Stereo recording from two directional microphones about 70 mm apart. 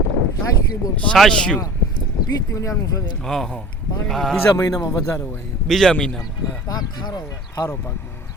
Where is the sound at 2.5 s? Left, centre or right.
Left.